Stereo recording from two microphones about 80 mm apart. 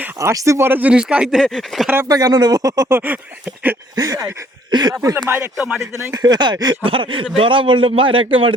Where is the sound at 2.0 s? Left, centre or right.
Right.